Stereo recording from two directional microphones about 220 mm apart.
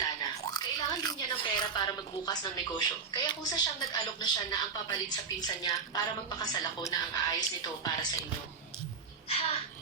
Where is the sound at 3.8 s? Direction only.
20° left (ahead or behind).